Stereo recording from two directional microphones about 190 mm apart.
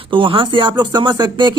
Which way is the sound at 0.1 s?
25° right (ahead or behind).